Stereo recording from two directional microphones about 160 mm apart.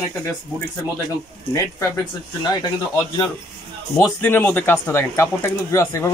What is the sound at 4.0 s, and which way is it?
Speech, 15° left (ahead or behind).